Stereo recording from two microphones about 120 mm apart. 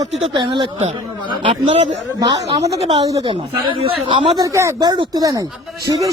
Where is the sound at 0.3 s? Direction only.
40° right (ahead or behind).